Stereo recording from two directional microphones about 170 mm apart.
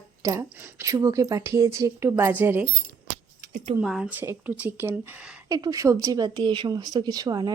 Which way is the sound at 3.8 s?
5° right (ahead or behind).